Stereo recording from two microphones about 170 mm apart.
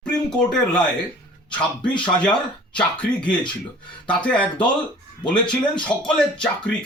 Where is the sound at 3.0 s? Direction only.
30° left (ahead or behind).